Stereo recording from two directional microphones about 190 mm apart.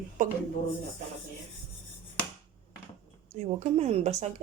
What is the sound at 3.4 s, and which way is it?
Speech, 35° right (ahead or behind).